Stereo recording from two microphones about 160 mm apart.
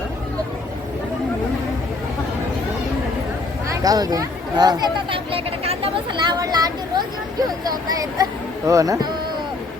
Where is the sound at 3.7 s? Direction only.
25° right (ahead or behind); by 6.3 s 40° right (ahead or behind).